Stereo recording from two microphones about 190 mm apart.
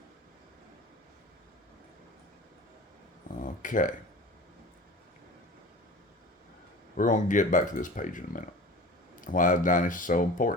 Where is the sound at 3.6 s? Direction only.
45° left (ahead or behind).